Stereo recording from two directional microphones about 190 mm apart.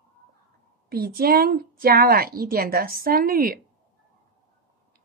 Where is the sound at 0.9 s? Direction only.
55° right (ahead or behind).